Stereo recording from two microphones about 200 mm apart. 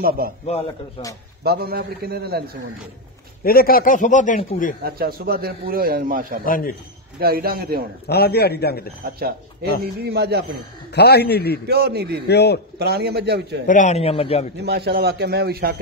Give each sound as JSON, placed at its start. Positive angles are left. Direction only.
{"t": 1.4, "sound": "a man's voice", "side_deg": -50}
{"t": 3.4, "sound": "a man's voice", "side_deg": 45}
{"t": 4.8, "sound": "a man's voice", "side_deg": -50}
{"t": 6.4, "sound": "a man's voice", "side_deg": 45}
{"t": 7.2, "sound": "a man's voice", "side_deg": -50}
{"t": 8.1, "sound": "a man's voice", "side_deg": 55}
{"t": 9.0, "sound": "a man's voice", "side_deg": -50}
{"t": 11.0, "sound": "a man's voice", "side_deg": 55}
{"t": 11.6, "sound": "a man's voice", "side_deg": -55}
{"t": 12.3, "sound": "a man's voice", "side_deg": 55}
{"t": 12.7, "sound": "a man's voice", "side_deg": -55}
{"t": 13.7, "sound": "a man's voice", "side_deg": 35}
{"t": 14.6, "sound": "a man's voice", "side_deg": -55}